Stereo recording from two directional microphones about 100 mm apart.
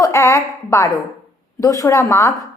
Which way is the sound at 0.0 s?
30° left (ahead or behind).